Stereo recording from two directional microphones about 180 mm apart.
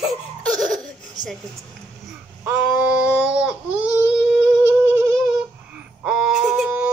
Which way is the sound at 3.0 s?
5° right (ahead or behind).